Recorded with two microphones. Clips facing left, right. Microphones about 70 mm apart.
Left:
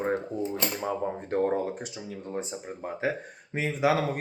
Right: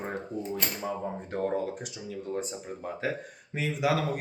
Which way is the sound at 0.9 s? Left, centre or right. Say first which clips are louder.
Left 4 dB; left.